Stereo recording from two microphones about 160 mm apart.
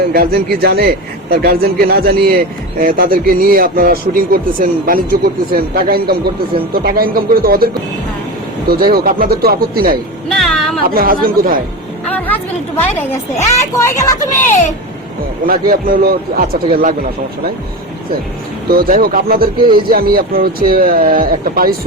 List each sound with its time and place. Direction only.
0.1 s a man's voice: 70° right (ahead or behind)
8.7 s a man's voice: 65° right (ahead or behind)
10.2 s a sound: 5° left (ahead or behind)
10.8 s speech: 65° right (ahead or behind)
12.0 s a woman's voice: 10° left (ahead or behind)
15.4 s speech: 65° right (ahead or behind)
18.7 s a man's voice: 65° right (ahead or behind)